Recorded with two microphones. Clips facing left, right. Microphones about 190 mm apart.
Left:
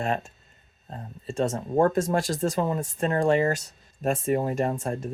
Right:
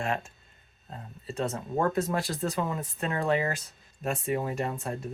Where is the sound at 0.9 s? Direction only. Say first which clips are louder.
Left 4 dB; 45° left (ahead or behind).